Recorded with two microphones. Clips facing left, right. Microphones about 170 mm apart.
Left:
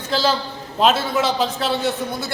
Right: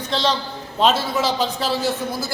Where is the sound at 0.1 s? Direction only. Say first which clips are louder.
Left 2 dB; 5° left (ahead or behind).